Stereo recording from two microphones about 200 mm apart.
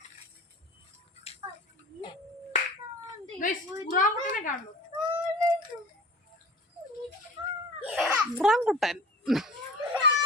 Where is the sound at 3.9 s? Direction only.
40° left (ahead or behind).